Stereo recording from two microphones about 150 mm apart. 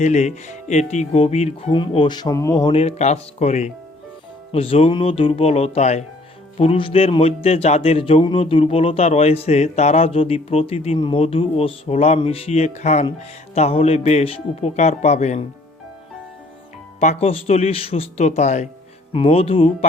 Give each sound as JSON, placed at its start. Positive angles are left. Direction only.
{"t": 0.0, "sound": "a man's voice", "side_deg": 50}
{"t": 17.0, "sound": "speech", "side_deg": 45}
{"t": 19.1, "sound": "a man's voice", "side_deg": 40}